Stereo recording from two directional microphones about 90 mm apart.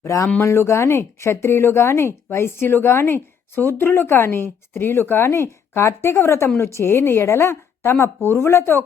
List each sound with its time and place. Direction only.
0.0 s speech: 35° left (ahead or behind)